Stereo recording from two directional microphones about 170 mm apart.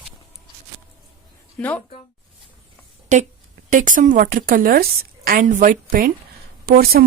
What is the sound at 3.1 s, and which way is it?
A woman's voice, 45° right (ahead or behind).